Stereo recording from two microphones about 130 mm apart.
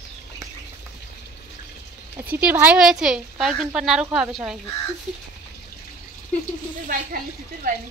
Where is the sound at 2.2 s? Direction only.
10° right (ahead or behind).